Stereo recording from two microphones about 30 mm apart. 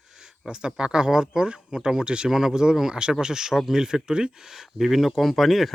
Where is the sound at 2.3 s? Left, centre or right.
Centre.